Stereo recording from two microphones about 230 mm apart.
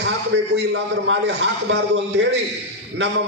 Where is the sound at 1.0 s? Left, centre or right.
Right.